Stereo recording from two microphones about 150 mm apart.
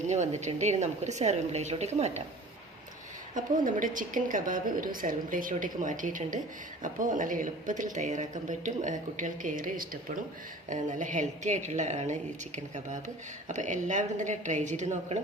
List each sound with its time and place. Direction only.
0.1 s a woman's voice: 50° right (ahead or behind)
3.3 s a woman's voice: 60° right (ahead or behind)
13.5 s a woman's voice: 55° right (ahead or behind)